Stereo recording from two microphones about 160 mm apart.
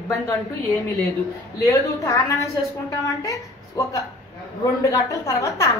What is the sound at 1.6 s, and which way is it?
A woman's voice, 20° left (ahead or behind).